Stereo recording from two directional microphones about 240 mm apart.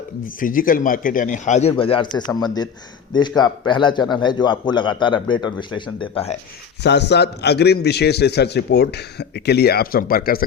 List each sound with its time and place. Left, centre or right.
0.3 s a man's voice: left
6.8 s a man's voice: left